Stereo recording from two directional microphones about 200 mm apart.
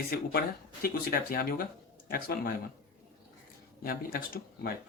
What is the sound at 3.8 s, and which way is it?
Speech, 45° left (ahead or behind).